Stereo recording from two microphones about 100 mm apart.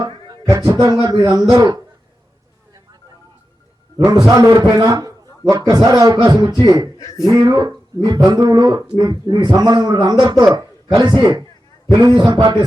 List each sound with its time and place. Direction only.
0.0 s a sound: 40° right (ahead or behind)
0.7 s a man's voice: 40° right (ahead or behind)
3.9 s a man's voice: 40° right (ahead or behind)
7.0 s speech: 35° left (ahead or behind)
7.3 s a man's voice: 40° right (ahead or behind)